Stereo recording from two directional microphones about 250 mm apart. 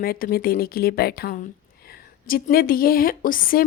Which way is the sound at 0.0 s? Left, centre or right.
Left.